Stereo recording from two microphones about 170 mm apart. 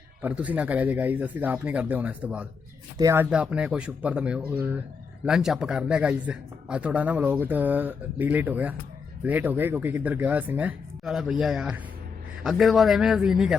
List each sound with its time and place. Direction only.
0.2 s speech: 10° right (ahead or behind)
3.2 s a man's voice: 5° right (ahead or behind)